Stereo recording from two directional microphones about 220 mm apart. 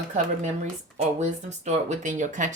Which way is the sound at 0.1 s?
30° right (ahead or behind).